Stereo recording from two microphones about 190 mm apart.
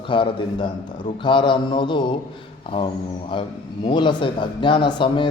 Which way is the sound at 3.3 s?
25° left (ahead or behind).